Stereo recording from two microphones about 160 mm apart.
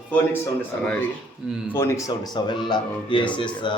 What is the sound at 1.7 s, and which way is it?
Speech, 15° left (ahead or behind).